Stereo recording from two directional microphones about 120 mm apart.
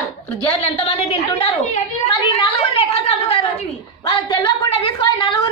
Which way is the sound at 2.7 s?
55° left (ahead or behind).